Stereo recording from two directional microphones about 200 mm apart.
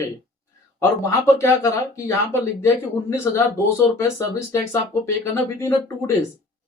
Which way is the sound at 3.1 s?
15° left (ahead or behind).